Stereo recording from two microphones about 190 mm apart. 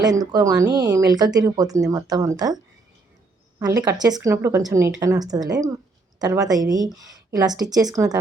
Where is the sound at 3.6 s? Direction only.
20° right (ahead or behind).